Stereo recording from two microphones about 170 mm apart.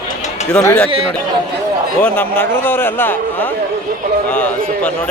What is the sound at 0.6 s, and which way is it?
Speech, 5° left (ahead or behind).